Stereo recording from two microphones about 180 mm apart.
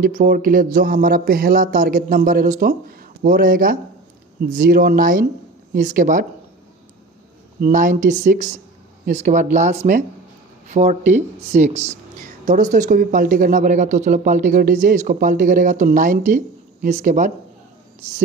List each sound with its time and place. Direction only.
0.0 s speech: 50° right (ahead or behind)
7.6 s speech: 45° right (ahead or behind)